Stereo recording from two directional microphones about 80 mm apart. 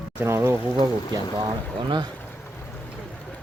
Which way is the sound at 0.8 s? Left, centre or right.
Right.